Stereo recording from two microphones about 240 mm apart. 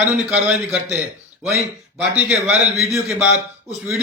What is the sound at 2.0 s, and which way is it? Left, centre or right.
A man's voice, centre.